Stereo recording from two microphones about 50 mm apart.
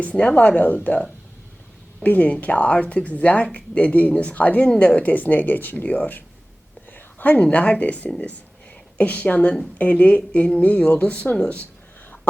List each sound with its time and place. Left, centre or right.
0.0 s speech: left
2.0 s speech: left
6.9 s a sound: left
7.4 s speech: left